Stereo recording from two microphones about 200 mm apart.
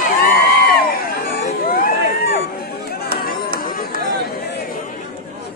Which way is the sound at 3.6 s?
45° left (ahead or behind).